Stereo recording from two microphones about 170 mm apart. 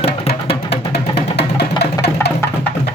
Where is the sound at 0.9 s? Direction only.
80° left.